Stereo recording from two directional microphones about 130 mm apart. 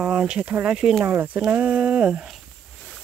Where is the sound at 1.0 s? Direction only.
15° right (ahead or behind).